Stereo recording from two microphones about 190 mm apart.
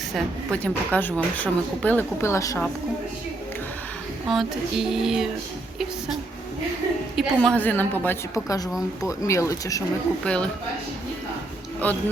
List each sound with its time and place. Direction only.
0.5 s speech: 5° left (ahead or behind)
4.3 s speech: centre (ahead or behind)
7.2 s speech: 5° left (ahead or behind)
10.2 s speech: 5° left (ahead or behind)
11.8 s speech: 10° left (ahead or behind)